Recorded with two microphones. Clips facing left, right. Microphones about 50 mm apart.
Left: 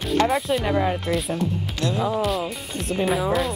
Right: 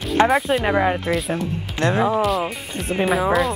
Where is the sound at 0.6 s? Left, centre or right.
Right.